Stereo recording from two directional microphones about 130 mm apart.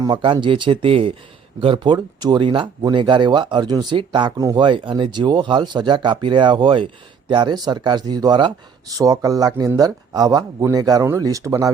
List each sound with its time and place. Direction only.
0.0 s speech: 35° right (ahead or behind)